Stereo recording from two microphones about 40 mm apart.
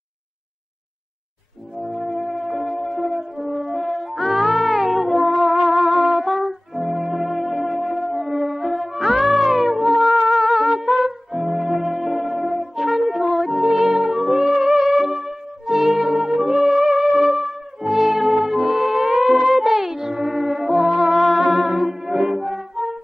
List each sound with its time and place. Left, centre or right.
1.8 s music: centre